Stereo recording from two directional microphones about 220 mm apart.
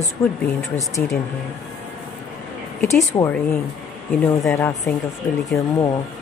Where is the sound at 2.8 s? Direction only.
10° left (ahead or behind).